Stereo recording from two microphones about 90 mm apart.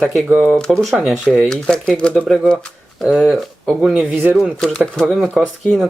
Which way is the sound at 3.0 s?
5° right (ahead or behind).